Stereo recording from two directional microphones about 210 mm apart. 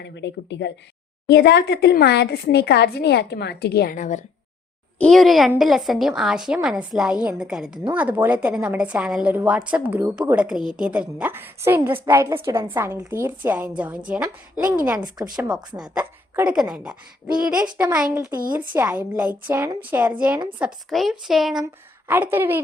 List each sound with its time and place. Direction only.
0.0 s speech: 55° left (ahead or behind); by 4.2 s 35° left (ahead or behind)
4.9 s a woman's voice: centre (ahead or behind); by 15.3 s 15° right (ahead or behind)
15.4 s a woman's voice: 5° right (ahead or behind)
17.9 s a woman's voice: 5° right (ahead or behind)